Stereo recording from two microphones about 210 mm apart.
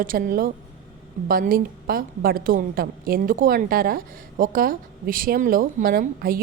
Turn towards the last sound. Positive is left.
turn(degrees=-45)  # may be behind; listen again after turning